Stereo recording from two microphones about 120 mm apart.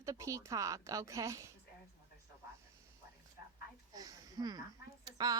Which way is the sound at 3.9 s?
30° right (ahead or behind).